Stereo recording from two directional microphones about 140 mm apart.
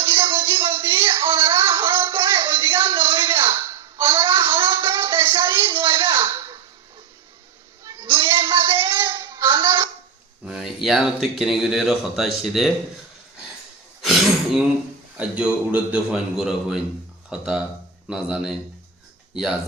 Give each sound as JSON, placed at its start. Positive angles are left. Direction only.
{"t": 0.0, "sound": "music", "side_deg": -15}
{"t": 3.2, "sound": "a sound", "side_deg": -15}
{"t": 7.9, "sound": "a sound", "side_deg": -15}
{"t": 10.4, "sound": "speech", "side_deg": -5}
{"t": 14.0, "sound": "throat clearing", "side_deg": 0}
{"t": 15.2, "sound": "speech", "side_deg": -10}